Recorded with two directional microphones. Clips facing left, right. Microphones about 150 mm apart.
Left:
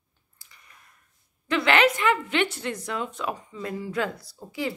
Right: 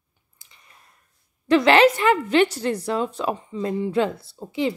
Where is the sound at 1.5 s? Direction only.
35° right (ahead or behind).